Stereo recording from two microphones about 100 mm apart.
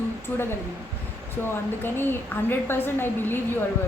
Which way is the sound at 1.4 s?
20° left (ahead or behind).